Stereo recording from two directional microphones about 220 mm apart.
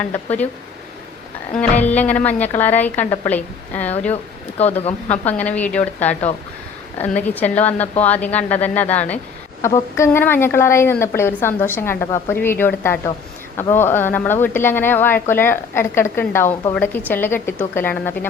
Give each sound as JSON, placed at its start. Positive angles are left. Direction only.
{"t": 0.0, "sound": "a woman's voice", "side_deg": 5}
{"t": 1.5, "sound": "a woman's voice", "side_deg": 5}
{"t": 4.1, "sound": "speech", "side_deg": 30}
{"t": 5.2, "sound": "a woman's voice", "side_deg": 5}